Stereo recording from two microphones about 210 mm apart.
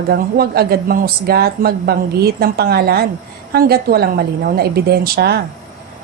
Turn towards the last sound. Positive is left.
turn(degrees=-50)  # may be behind; listen again after turning